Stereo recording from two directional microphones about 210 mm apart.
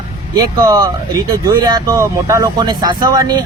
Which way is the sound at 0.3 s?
15° right (ahead or behind).